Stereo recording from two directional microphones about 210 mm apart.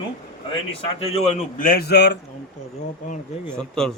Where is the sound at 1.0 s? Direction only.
35° left (ahead or behind); by 2.2 s 50° left (ahead or behind).